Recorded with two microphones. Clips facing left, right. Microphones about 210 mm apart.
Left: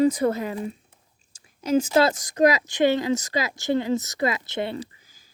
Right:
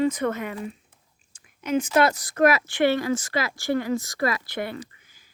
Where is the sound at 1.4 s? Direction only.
30° left (ahead or behind).